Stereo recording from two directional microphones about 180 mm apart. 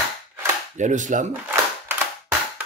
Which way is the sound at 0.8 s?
45° right (ahead or behind).